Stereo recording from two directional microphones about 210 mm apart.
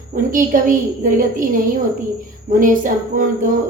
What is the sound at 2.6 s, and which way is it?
Speech, 40° right (ahead or behind).